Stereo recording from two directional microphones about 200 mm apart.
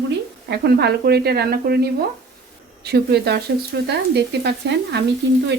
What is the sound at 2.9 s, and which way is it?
Speech, 55° right (ahead or behind).